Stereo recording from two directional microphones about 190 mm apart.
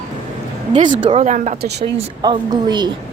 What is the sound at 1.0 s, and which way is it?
Speech, 30° right (ahead or behind).